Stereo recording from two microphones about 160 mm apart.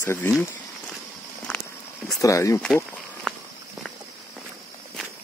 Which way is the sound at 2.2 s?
20° left (ahead or behind).